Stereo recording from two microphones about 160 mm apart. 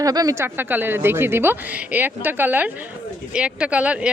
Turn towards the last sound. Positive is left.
turn(degrees=-10)  # may be behind; listen again after turning